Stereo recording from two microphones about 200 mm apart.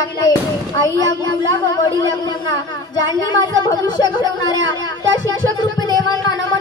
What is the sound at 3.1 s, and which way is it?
Speech, 20° left (ahead or behind).